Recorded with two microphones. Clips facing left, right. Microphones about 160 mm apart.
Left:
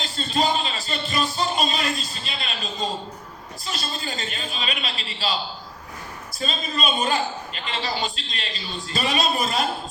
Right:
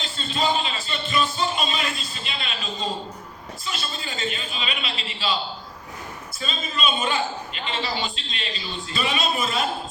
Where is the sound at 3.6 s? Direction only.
40° left (ahead or behind).